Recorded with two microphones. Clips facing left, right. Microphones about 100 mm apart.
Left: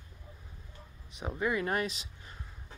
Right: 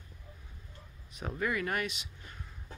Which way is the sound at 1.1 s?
20° left (ahead or behind).